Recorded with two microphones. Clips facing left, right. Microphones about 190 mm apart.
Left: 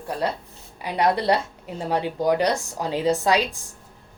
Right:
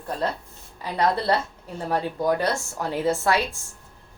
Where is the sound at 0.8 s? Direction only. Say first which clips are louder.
Left 2 dB; 15° left (ahead or behind).